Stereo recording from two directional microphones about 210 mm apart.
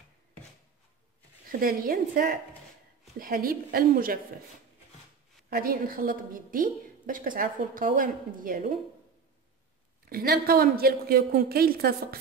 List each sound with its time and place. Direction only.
1.5 s a woman's voice: 45° right (ahead or behind)
5.5 s a woman's voice: 45° right (ahead or behind)
10.0 s a woman's voice: 45° right (ahead or behind)